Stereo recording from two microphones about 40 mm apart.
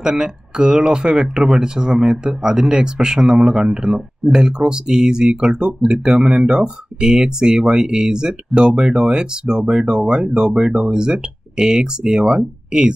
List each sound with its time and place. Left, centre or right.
0.0 s speech: centre